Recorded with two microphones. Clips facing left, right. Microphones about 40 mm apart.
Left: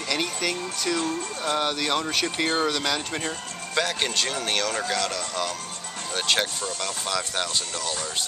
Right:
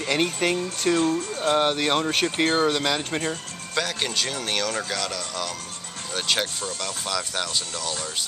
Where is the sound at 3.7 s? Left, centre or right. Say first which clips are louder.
Left 1 dB; centre.